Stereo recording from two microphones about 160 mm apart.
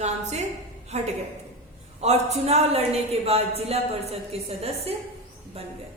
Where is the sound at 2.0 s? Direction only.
40° right (ahead or behind).